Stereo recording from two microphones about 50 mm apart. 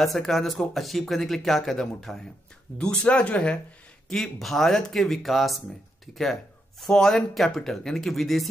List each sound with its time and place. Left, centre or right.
0.0 s speech: centre
1.8 s speech: centre
4.1 s speech: centre
6.8 s speech: centre